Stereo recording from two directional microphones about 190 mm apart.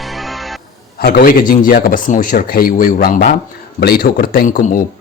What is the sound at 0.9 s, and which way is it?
Speech, 50° left (ahead or behind).